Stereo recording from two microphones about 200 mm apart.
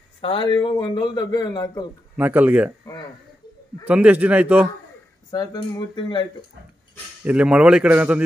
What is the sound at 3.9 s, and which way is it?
Speech, 5° right (ahead or behind).